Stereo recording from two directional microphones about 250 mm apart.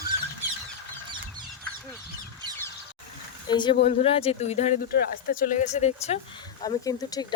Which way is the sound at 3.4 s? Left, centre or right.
Centre.